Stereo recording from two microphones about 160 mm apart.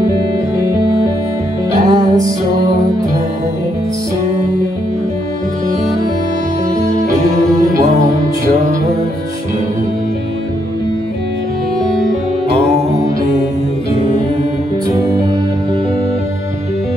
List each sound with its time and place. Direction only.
1.9 s music: 25° right (ahead or behind)
11.8 s music: 5° left (ahead or behind)